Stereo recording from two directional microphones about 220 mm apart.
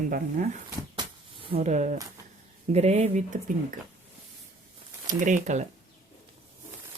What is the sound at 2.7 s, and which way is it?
Speech, 30° right (ahead or behind).